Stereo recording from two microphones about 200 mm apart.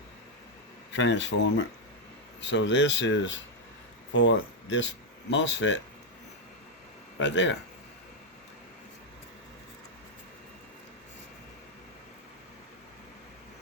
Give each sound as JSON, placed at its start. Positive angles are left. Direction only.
{"t": 0.9, "sound": "speech", "side_deg": 65}
{"t": 7.2, "sound": "speech", "side_deg": 65}